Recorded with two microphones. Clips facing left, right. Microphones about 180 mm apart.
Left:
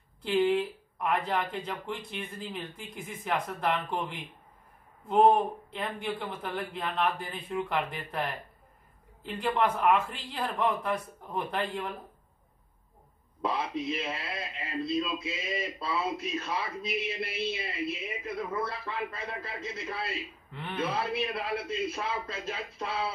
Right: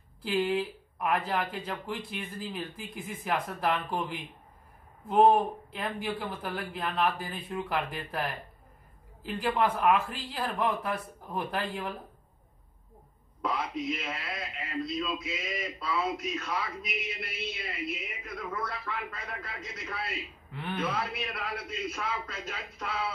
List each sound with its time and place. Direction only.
0.2 s a man's voice: centre (ahead or behind)
5.7 s a man's voice: centre (ahead or behind)
13.4 s a man's voice: 30° left (ahead or behind)